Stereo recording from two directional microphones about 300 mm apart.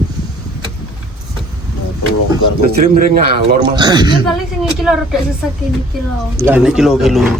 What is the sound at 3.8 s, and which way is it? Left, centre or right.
Speech, centre.